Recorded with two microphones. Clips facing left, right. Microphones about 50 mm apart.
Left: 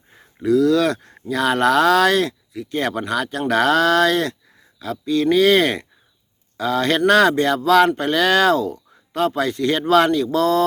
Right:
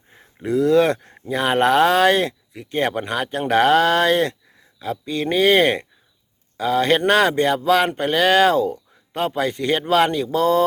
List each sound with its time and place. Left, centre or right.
0.2 s speech: right